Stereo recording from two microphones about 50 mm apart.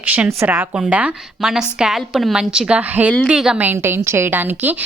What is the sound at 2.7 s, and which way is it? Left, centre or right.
Speech, right.